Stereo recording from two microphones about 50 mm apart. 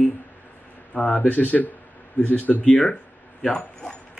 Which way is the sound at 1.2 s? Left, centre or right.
Left.